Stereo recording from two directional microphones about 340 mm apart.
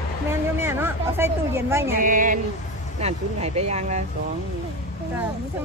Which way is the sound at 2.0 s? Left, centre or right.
Right.